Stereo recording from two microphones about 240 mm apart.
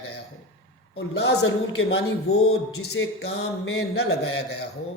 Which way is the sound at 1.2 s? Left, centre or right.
Left.